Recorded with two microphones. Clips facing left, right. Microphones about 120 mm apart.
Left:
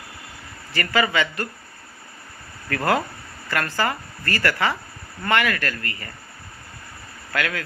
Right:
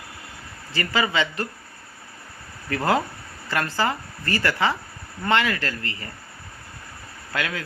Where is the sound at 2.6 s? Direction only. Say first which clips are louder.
Even; 20° right (ahead or behind).